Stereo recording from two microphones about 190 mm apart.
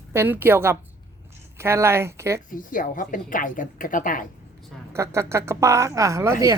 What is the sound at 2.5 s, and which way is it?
A woman's voice, 45° left (ahead or behind).